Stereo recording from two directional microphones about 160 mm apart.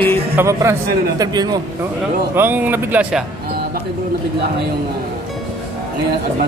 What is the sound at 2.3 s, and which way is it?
Speech, 10° right (ahead or behind).